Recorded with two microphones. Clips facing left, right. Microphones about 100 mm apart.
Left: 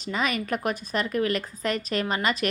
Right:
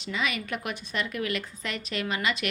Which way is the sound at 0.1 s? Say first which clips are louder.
Left 4 dB; 40° left (ahead or behind).